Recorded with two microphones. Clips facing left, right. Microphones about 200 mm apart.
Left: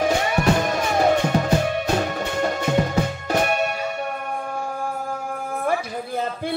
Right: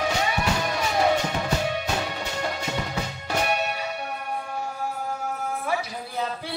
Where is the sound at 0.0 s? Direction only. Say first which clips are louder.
Left 6 dB; 50° left (ahead or behind).